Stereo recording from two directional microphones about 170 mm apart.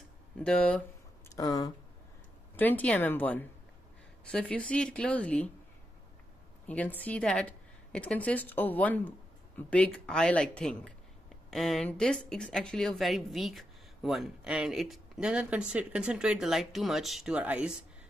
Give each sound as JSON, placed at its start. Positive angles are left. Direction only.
{"t": 0.4, "sound": "a woman's voice", "side_deg": 5}
{"t": 1.3, "sound": "speech", "side_deg": 20}
{"t": 2.5, "sound": "a woman's voice", "side_deg": 10}
{"t": 6.7, "sound": "a woman's voice", "side_deg": 10}